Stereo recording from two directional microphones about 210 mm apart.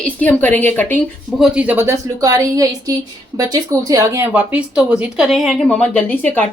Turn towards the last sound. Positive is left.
turn(degrees=5)  # may be behind; listen again after turning